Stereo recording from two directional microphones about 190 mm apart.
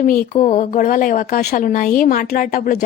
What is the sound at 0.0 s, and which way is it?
A woman's voice, 45° left (ahead or behind).